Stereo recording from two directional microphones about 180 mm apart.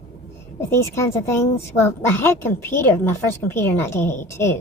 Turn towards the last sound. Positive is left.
turn(degrees=15)  # may be behind; listen again after turning